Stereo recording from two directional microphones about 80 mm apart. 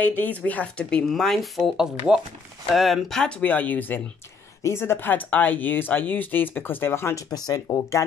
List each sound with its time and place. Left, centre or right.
0.0 s speech: left; by 1.5 s centre
1.8 s speech: centre; by 7.2 s left
7.2 s speech: left